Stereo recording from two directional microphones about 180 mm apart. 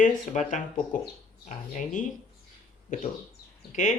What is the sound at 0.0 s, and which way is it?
Speech, 45° left (ahead or behind).